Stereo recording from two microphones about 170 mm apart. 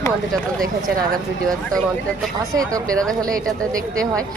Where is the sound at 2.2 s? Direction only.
Centre (ahead or behind).